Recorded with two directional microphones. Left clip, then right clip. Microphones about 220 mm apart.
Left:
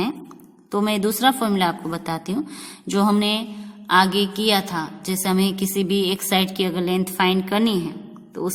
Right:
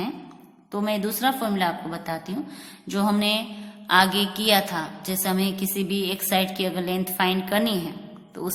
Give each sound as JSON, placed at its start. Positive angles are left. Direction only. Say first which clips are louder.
{"t": 0.7, "sound": "a woman's voice", "louder": "left 5 dB", "side_deg": 35}